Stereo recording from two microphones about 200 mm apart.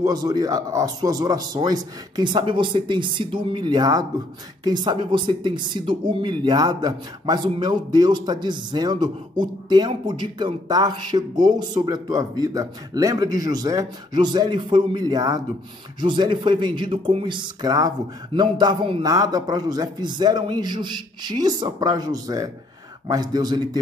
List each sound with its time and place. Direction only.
0.0 s speech: 20° right (ahead or behind)